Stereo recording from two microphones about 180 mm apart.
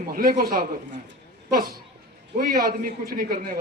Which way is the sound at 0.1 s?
55° right (ahead or behind).